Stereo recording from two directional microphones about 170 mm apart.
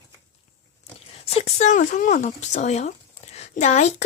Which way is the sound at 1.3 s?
40° left (ahead or behind).